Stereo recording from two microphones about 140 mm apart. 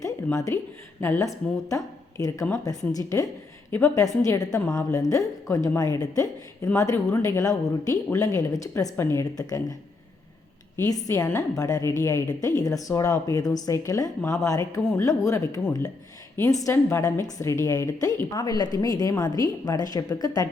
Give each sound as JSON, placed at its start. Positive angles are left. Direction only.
{"t": 0.0, "sound": "a sound", "side_deg": 25}
{"t": 1.0, "sound": "a woman's voice", "side_deg": 20}
{"t": 10.8, "sound": "a woman's voice", "side_deg": 25}